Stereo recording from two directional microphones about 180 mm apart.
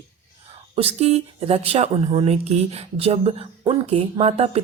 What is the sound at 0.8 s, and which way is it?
Speech, 35° right (ahead or behind).